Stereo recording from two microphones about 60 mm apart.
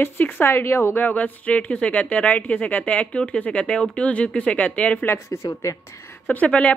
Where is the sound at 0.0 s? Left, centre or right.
Left.